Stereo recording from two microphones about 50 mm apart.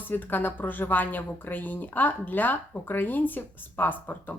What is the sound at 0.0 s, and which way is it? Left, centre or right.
Speech, left.